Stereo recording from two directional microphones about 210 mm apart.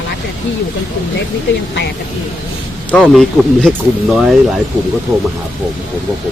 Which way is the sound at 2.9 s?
Centre (ahead or behind).